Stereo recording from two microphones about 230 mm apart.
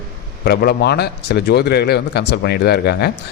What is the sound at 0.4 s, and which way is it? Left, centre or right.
A man's voice, left.